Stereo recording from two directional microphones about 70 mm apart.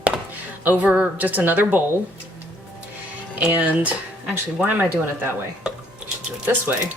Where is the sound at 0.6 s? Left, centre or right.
Right.